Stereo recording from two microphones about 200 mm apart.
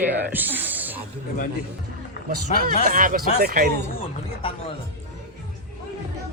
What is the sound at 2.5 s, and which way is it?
Speech, 35° left (ahead or behind).